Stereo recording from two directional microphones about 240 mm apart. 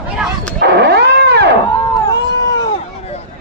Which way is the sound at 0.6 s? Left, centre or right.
Right.